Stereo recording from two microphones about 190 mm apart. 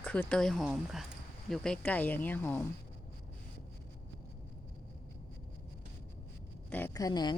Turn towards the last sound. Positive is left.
turn(degrees=20)  # may be behind; listen again after turning